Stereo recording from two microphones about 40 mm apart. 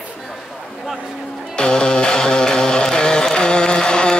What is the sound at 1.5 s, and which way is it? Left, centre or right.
Music, left.